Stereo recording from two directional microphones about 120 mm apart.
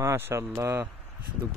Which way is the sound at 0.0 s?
20° right (ahead or behind).